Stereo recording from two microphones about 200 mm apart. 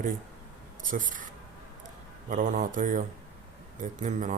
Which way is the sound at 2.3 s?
40° right (ahead or behind).